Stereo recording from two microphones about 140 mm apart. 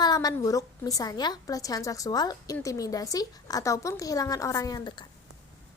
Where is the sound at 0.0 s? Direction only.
30° left (ahead or behind).